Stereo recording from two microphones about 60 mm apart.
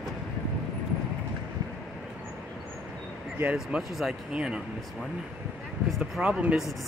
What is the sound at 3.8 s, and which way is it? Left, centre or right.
Speech, centre.